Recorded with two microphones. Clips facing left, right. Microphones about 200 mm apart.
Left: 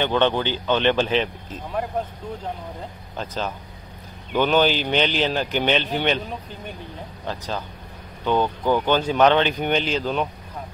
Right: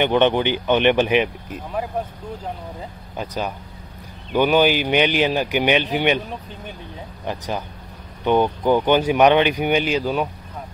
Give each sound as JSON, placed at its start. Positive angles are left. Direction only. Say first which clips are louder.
{"t": 0.0, "sound": "speech", "louder": "right 3 dB", "side_deg": -15}
{"t": 3.2, "sound": "speech", "louder": "right 2 dB", "side_deg": -15}
{"t": 6.5, "sound": "speech", "louder": "even", "side_deg": 0}
{"t": 7.2, "sound": "speech", "louder": "right 3 dB", "side_deg": -15}